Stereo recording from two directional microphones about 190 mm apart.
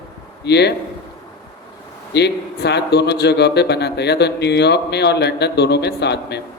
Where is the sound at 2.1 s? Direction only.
60° left (ahead or behind).